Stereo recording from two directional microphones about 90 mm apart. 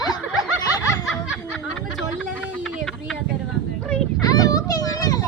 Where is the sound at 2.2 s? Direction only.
15° left (ahead or behind).